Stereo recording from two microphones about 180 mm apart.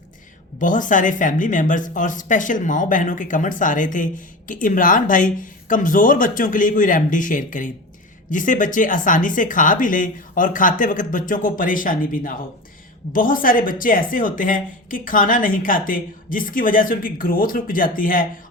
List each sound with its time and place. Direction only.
0.6 s speech: 45° left (ahead or behind)